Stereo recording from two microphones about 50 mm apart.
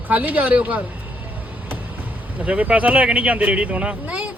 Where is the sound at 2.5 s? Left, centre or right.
Right.